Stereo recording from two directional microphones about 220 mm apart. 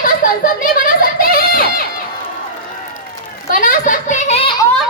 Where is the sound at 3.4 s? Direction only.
40° left (ahead or behind).